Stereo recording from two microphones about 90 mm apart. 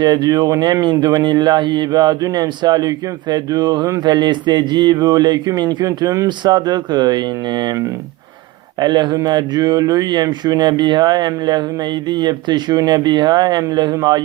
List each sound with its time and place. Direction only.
0.0 s speech: 50° right (ahead or behind)
6.2 s speech: 55° right (ahead or behind)
8.8 s a man's voice: 55° right (ahead or behind)